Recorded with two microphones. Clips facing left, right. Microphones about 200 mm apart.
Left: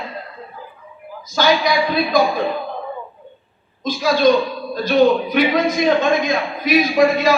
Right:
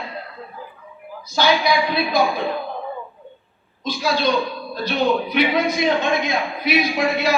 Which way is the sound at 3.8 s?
45° left (ahead or behind).